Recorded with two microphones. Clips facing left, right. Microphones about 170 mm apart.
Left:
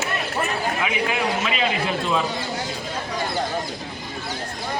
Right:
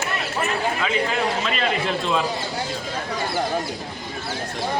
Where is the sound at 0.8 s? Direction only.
10° left (ahead or behind).